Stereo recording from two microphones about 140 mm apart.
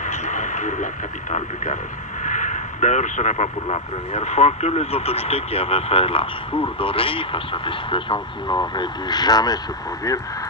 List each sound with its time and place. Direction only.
0.0 s radio: 60° left (ahead or behind)
1.3 s speech: 55° left (ahead or behind); by 9.6 s 30° left (ahead or behind)